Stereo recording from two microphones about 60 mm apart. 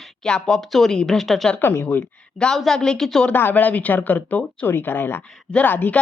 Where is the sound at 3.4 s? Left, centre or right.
Left.